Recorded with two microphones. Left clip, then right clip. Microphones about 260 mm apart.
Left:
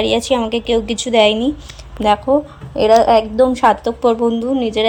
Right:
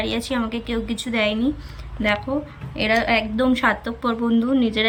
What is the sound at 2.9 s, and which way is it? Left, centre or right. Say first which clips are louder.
Speech: left 9 dB; left.